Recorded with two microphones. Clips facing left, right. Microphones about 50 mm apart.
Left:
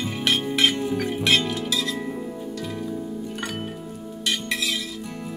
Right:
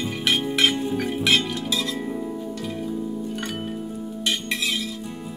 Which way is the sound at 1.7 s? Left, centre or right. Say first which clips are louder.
Even; right.